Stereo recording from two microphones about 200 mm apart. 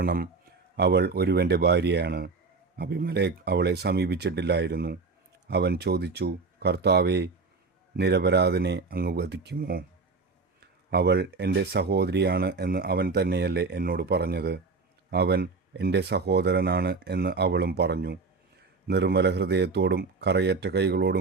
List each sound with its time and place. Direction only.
0.0 s speech: 50° right (ahead or behind)
10.9 s speech: 55° right (ahead or behind)